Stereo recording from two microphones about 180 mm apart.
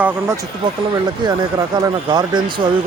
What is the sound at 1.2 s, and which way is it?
Speech, 25° right (ahead or behind).